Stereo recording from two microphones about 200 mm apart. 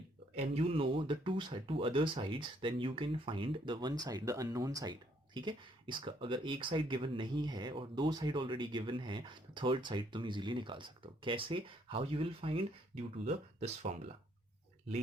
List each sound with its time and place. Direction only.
0.5 s speech: 30° right (ahead or behind)